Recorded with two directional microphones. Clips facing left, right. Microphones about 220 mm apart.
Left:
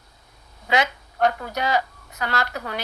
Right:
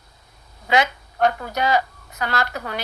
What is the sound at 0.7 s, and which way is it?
A woman's voice, 50° right (ahead or behind).